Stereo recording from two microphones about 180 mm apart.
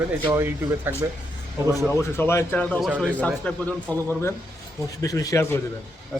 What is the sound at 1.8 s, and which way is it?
Speech, 15° left (ahead or behind).